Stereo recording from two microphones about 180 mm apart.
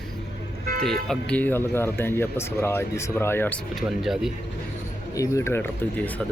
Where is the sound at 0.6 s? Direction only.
55° right (ahead or behind).